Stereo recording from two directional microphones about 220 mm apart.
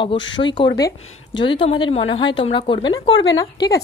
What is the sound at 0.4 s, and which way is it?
Speech, 20° left (ahead or behind).